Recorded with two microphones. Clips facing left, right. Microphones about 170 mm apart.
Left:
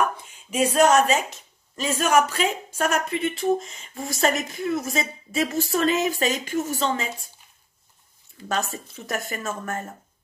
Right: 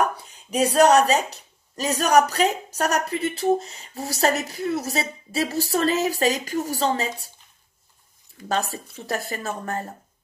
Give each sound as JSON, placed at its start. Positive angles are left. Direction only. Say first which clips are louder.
{"t": 0.0, "sound": "a woman's voice", "louder": "right 1 dB", "side_deg": -40}
{"t": 8.5, "sound": "speech", "louder": "right 2 dB", "side_deg": -35}